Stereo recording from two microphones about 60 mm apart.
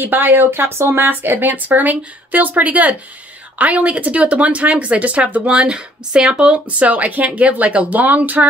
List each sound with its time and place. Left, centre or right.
0.0 s speech: right